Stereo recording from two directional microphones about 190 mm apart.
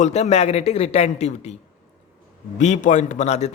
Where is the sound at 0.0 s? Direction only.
35° left (ahead or behind).